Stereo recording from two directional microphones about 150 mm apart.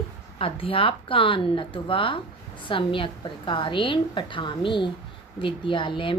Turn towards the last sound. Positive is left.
turn(degrees=35)  # may be behind; listen again after turning